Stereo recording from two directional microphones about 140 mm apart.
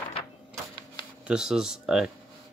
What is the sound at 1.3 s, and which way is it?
Speech, 5° right (ahead or behind).